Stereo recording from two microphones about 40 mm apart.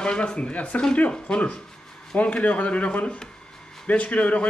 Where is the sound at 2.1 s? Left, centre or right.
Left.